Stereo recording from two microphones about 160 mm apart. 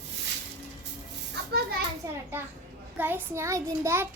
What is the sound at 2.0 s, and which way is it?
A child's voice, 20° right (ahead or behind).